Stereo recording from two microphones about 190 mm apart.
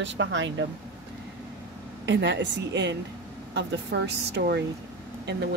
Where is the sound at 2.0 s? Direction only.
65° right (ahead or behind).